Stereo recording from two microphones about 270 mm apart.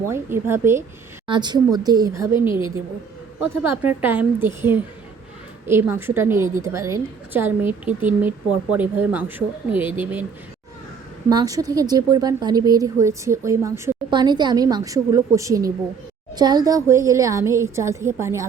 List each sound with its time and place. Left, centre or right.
0.1 s a woman's voice: centre
3.5 s a woman's voice: centre
11.3 s a woman's voice: centre